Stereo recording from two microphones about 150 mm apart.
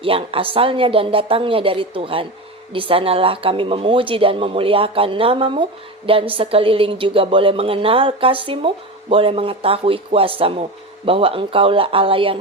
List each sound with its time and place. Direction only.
0.0 s a woman's voice: 40° right (ahead or behind)